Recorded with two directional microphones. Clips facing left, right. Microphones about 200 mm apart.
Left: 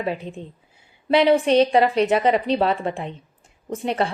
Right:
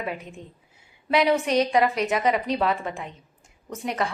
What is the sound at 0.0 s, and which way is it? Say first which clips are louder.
A woman's voice: left 6 dB; 30° left (ahead or behind).